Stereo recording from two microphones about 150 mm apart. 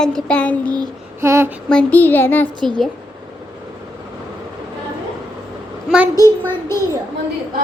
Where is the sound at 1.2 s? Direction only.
20° right (ahead or behind).